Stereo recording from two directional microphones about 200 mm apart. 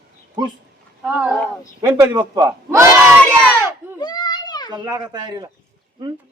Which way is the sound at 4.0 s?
20° left (ahead or behind).